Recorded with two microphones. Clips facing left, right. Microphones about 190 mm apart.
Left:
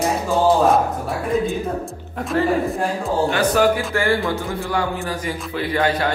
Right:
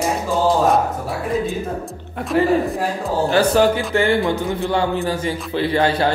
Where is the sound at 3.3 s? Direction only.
30° right (ahead or behind).